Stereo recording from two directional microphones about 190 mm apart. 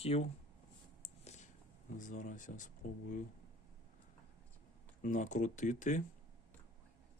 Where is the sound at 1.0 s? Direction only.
35° left (ahead or behind).